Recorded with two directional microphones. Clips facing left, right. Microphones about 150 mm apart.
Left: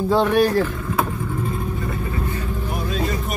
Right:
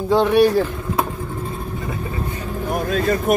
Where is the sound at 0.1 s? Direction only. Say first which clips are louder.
Right 3 dB; 10° right (ahead or behind).